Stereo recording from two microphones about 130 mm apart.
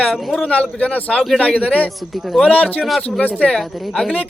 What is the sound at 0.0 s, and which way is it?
Speech, centre (ahead or behind).